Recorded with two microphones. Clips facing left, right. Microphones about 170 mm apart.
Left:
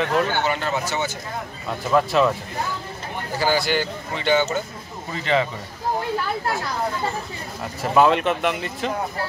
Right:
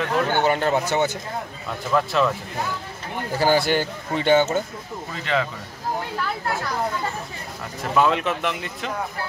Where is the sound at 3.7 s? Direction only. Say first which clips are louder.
Right 1 dB; 50° right (ahead or behind).